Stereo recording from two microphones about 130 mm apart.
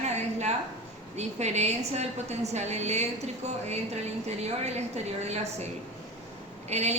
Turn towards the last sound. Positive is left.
turn(degrees=-60)  # may be behind; listen again after turning